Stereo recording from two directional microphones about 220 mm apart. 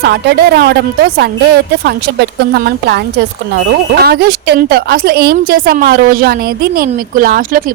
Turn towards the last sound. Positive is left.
turn(degrees=-40)  # may be behind; listen again after turning